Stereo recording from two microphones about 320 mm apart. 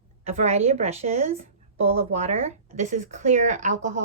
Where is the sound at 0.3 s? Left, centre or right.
Right.